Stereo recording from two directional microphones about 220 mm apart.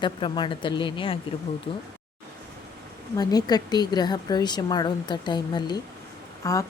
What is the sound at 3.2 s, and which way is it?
A woman's voice, 15° left (ahead or behind).